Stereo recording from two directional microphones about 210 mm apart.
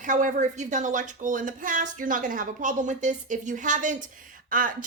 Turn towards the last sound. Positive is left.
turn(degrees=-40)  # may be behind; listen again after turning